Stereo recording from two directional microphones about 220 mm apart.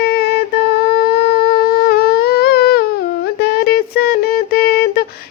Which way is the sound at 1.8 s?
45° left (ahead or behind).